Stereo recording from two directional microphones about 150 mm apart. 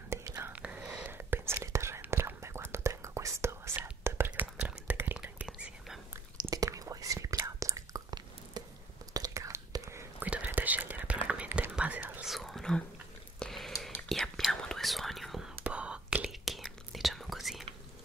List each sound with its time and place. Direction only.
0.1 s whispering: 20° right (ahead or behind)
0.5 s whispering: 10° right (ahead or behind)
6.4 s whispering: 20° right (ahead or behind)
12.3 s whispering: centre (ahead or behind)